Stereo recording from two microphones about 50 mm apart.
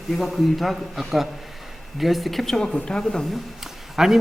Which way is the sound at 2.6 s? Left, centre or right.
Left.